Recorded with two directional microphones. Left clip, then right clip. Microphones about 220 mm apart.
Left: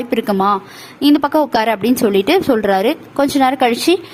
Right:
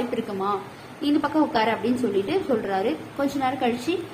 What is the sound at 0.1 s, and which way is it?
A woman's voice, 50° left (ahead or behind).